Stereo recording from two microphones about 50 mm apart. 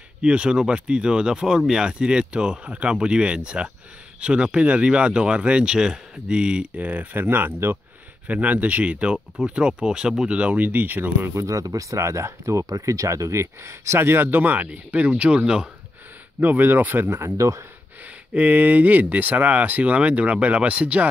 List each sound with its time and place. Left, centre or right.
0.2 s speech: centre; by 7.8 s right
8.3 s speech: right
11.3 s speech: right
14.7 s speech: right
16.3 s speech: right
17.4 s speech: right
18.0 s speech: right